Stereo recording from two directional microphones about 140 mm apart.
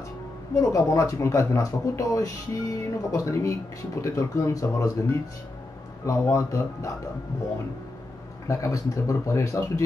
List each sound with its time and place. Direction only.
0.6 s speech: 20° left (ahead or behind)
8.5 s speech: 20° left (ahead or behind)